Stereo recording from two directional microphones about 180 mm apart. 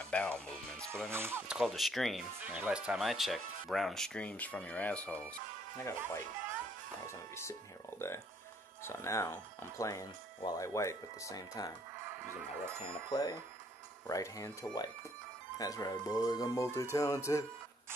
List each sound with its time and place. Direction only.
0.0 s speech: 5° left (ahead or behind)
1.1 s speech: 15° right (ahead or behind)
1.6 s speech: centre (ahead or behind)
7.1 s speech: 15° left (ahead or behind)
12.1 s music: 10° right (ahead or behind)
12.8 s speech: 25° left (ahead or behind)